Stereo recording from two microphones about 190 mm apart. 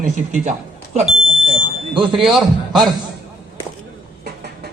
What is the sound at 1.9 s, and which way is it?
Speech, 25° right (ahead or behind).